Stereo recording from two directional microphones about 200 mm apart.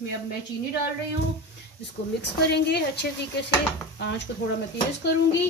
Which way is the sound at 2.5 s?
55° left (ahead or behind).